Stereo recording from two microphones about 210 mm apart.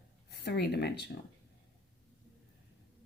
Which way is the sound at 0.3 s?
50° left (ahead or behind).